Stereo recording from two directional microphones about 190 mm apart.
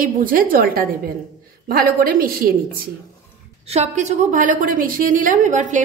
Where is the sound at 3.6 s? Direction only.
35° right (ahead or behind).